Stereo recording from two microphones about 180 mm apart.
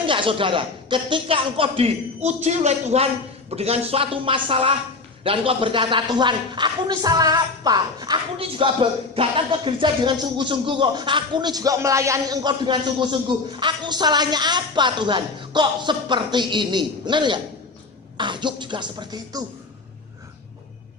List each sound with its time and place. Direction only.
0.0 s a woman's voice: 30° right (ahead or behind)